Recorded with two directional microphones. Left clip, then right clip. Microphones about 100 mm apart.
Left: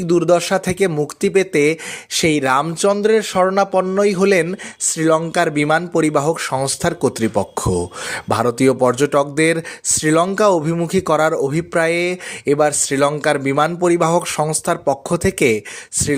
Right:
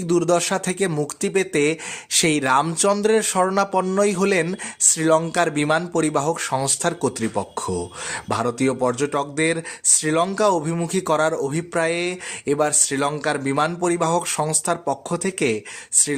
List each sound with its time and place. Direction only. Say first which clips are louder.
0.1 s speech: left 5 dB; 20° left (ahead or behind)
7.2 s speech: left 6 dB; 50° left (ahead or behind)